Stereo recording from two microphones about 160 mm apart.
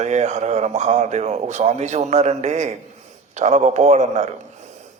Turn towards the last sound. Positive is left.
turn(degrees=-45)  # may be behind; listen again after turning